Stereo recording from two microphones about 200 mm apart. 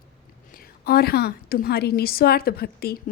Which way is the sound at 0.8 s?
50° left (ahead or behind).